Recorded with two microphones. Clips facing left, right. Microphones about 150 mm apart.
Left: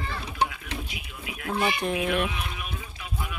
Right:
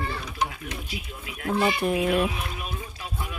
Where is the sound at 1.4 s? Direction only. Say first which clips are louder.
Right 3 dB; 30° right (ahead or behind).